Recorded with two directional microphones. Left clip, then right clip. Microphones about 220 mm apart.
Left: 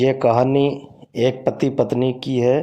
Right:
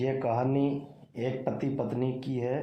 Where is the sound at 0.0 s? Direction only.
40° left (ahead or behind).